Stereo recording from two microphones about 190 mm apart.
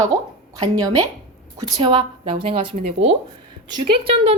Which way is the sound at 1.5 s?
20° right (ahead or behind).